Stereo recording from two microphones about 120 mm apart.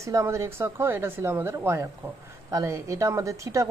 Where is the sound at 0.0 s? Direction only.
25° right (ahead or behind).